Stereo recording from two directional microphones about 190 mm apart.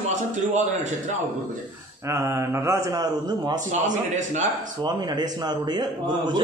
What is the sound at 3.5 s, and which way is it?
Speech, 40° right (ahead or behind).